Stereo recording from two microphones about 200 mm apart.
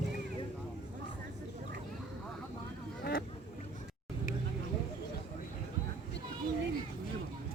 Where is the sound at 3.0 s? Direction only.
50° left (ahead or behind).